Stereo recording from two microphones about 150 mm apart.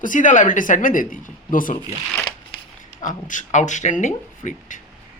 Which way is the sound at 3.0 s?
60° left (ahead or behind).